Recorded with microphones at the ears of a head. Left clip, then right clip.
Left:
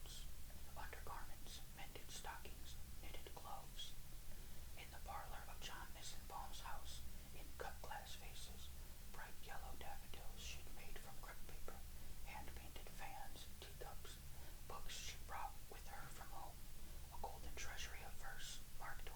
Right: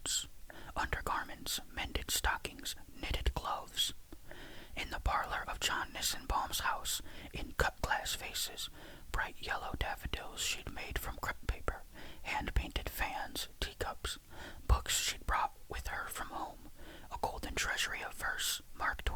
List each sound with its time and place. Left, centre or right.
0.7 s whispering: right